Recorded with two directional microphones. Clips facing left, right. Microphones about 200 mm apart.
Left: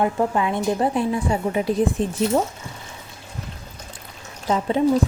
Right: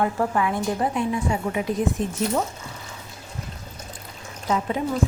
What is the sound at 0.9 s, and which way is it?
Speech, 35° left (ahead or behind).